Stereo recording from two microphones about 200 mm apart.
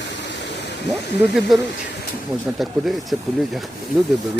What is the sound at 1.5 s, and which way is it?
Speech, centre (ahead or behind).